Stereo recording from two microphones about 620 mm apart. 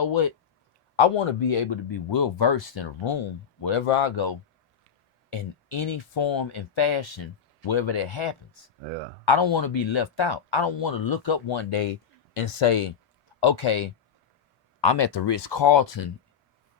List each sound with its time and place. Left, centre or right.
0.0 s speech: left
0.9 s speech: left
3.6 s speech: left